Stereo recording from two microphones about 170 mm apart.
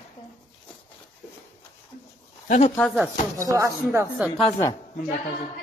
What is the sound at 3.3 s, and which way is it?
Speech, 20° right (ahead or behind).